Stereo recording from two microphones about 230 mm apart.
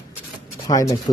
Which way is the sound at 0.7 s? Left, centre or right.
Centre.